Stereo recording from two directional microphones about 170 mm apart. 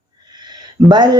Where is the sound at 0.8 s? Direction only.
25° right (ahead or behind).